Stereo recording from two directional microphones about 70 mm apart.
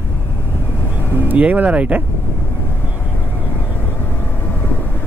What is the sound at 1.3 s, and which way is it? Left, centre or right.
Speech, right.